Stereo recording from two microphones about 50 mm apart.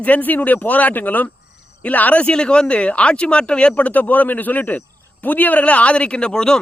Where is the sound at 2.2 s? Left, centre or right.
Centre.